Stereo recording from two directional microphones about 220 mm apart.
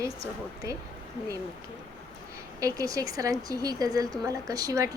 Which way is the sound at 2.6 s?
15° right (ahead or behind).